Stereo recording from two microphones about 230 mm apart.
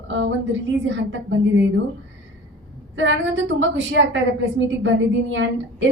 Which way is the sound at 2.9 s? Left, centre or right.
Right.